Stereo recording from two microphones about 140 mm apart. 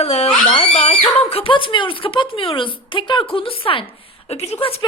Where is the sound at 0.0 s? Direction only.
50° left (ahead or behind).